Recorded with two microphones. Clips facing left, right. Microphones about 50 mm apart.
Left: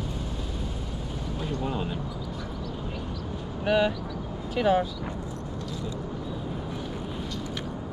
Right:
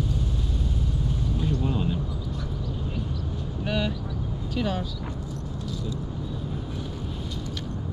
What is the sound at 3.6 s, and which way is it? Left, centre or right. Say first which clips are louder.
Vehicle: left 5 dB; centre.